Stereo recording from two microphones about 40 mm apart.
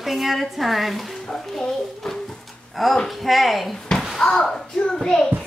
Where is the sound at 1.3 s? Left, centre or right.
Centre.